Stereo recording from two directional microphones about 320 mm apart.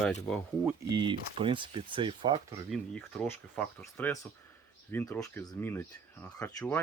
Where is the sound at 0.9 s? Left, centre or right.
Centre.